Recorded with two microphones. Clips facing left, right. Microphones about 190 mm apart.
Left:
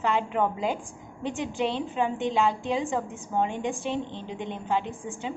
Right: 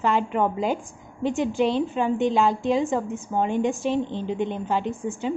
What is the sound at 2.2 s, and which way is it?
A woman's voice, 40° right (ahead or behind).